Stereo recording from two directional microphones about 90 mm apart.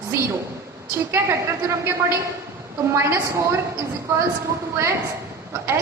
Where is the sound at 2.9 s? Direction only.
30° right (ahead or behind).